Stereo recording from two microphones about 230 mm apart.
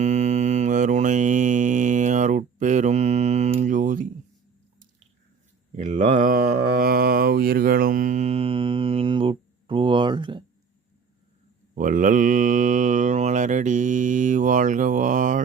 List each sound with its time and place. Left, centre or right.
0.0 s mantra: right
5.7 s mantra: right
11.7 s mantra: right